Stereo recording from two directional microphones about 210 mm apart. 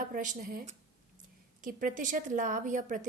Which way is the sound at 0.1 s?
40° right (ahead or behind).